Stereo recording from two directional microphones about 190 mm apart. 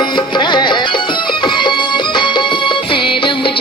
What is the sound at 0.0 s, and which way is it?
Music, 25° left (ahead or behind).